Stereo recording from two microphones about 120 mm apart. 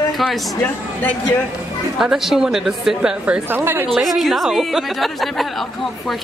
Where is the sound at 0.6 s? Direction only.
15° left (ahead or behind).